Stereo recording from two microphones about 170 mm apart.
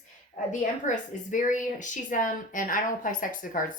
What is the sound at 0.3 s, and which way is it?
A woman's voice, 40° left (ahead or behind).